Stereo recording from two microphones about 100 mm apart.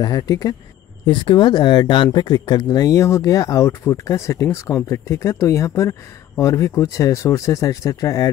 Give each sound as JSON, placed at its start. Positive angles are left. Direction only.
{"t": 0.0, "sound": "speech", "side_deg": 40}
{"t": 1.0, "sound": "speech", "side_deg": 50}